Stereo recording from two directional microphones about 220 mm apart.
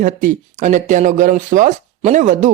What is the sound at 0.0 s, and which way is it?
Speech, 40° right (ahead or behind).